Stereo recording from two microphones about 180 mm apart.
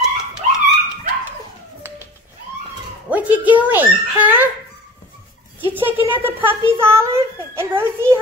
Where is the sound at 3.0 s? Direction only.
10° right (ahead or behind).